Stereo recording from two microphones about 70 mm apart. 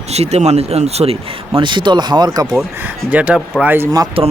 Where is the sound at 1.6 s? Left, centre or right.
Right.